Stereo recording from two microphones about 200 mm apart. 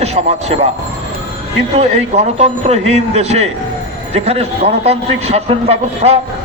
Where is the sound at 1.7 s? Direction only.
30° right (ahead or behind).